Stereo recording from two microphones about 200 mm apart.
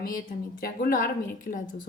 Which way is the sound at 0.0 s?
45° left (ahead or behind).